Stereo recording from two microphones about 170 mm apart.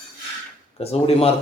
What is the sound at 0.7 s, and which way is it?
Speech, 35° left (ahead or behind).